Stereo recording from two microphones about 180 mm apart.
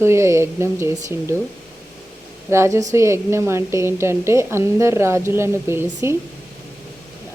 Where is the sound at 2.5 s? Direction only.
15° right (ahead or behind).